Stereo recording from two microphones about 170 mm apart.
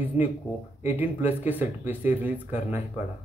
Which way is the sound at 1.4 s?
10° right (ahead or behind).